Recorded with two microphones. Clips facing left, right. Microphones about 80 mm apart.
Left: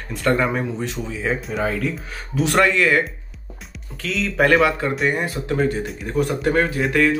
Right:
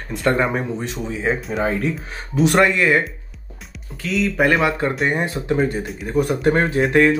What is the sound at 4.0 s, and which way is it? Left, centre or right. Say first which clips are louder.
Speech: right 1 dB; centre.